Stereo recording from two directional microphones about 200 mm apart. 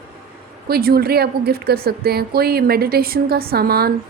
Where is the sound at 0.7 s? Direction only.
50° right (ahead or behind).